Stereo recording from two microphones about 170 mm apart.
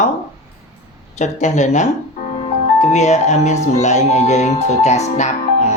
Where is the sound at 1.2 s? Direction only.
45° left (ahead or behind).